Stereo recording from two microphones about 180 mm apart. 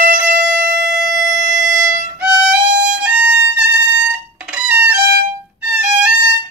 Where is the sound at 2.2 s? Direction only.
5° right (ahead or behind).